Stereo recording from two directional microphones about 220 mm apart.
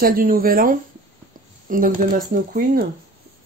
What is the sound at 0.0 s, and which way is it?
Speech, 40° right (ahead or behind).